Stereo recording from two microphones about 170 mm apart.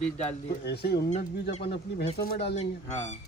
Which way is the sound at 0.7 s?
70° left (ahead or behind).